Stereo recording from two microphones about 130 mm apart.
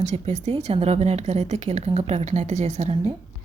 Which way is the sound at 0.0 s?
60° right (ahead or behind).